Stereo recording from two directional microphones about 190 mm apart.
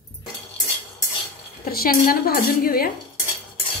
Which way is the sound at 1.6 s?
50° left (ahead or behind).